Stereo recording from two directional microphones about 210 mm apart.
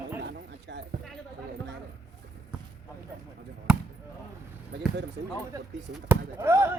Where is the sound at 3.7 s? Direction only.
5° right (ahead or behind).